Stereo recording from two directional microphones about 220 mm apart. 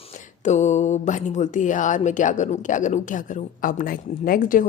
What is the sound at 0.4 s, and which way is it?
A woman's voice, 30° left (ahead or behind).